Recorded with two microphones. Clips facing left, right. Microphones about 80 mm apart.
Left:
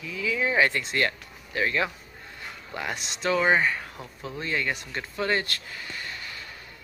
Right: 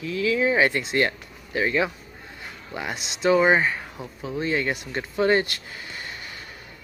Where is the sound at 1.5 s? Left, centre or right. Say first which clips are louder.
Right 3 dB; centre.